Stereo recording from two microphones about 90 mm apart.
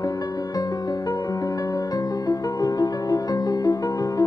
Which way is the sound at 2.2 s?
45° left (ahead or behind).